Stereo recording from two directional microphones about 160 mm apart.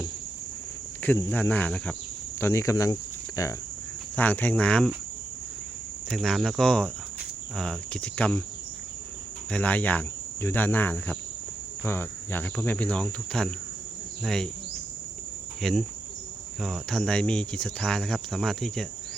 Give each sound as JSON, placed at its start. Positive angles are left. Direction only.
{"t": 1.0, "sound": "cricket", "side_deg": 10}
{"t": 2.4, "sound": "speech", "side_deg": 20}
{"t": 4.1, "sound": "cricket", "side_deg": 10}
{"t": 6.1, "sound": "speech", "side_deg": 0}
{"t": 7.5, "sound": "cricket", "side_deg": 5}
{"t": 9.5, "sound": "cricket", "side_deg": 10}
{"t": 14.2, "sound": "speech", "side_deg": 5}
{"t": 15.6, "sound": "speech", "side_deg": 0}